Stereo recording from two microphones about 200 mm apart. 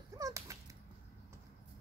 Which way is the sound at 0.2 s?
15° right (ahead or behind).